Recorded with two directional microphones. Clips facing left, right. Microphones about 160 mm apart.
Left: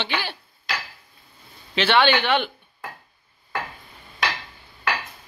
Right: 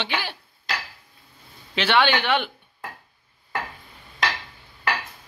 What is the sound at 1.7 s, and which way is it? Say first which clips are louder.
Speech: left 2 dB; 10° right (ahead or behind).